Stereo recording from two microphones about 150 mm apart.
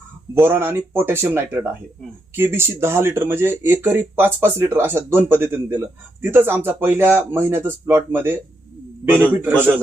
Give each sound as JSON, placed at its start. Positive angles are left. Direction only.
{"t": 0.3, "sound": "speech", "side_deg": -15}